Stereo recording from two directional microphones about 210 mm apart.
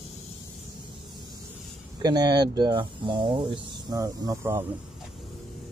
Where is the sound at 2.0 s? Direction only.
20° right (ahead or behind).